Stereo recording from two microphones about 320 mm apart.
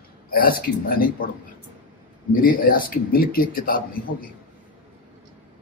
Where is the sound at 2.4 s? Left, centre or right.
Left.